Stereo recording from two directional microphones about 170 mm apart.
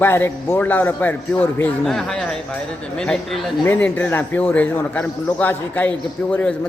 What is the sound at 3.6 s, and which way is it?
A man's voice, 10° left (ahead or behind).